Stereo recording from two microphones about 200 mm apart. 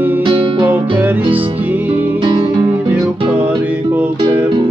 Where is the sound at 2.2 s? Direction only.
25° right (ahead or behind).